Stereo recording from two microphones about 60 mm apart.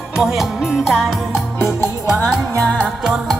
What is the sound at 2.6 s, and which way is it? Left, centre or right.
Music, left.